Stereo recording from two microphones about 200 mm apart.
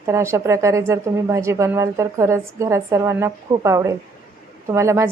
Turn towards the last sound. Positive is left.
turn(degrees=-15)  # may be behind; listen again after turning